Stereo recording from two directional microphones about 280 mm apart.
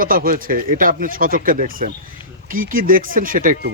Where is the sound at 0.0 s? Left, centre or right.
Right.